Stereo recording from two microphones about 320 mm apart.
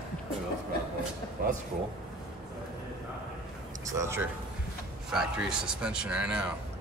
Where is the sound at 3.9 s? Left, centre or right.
Centre.